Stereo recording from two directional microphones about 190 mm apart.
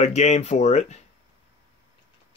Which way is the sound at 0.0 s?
35° left (ahead or behind).